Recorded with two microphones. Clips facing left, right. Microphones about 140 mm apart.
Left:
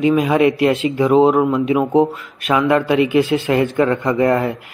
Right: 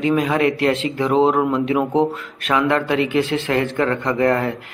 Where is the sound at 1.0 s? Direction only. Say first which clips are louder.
Left 4 dB; 5° left (ahead or behind).